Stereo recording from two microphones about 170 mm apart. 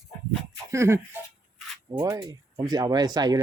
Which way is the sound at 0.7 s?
15° right (ahead or behind).